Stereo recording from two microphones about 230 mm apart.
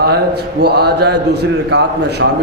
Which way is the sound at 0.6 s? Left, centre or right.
Right.